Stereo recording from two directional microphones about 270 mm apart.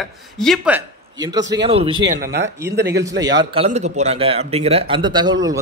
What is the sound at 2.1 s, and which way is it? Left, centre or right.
Speech, right.